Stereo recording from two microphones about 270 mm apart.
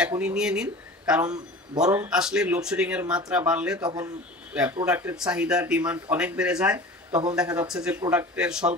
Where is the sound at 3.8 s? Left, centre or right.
Centre.